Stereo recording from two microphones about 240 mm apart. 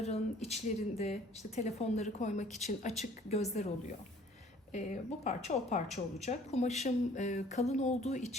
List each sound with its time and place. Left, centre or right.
0.0 s a woman's voice: left